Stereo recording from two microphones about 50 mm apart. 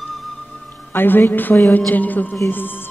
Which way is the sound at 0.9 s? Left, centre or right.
Left.